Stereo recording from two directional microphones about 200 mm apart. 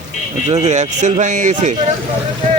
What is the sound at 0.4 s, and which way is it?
Speech, 35° right (ahead or behind).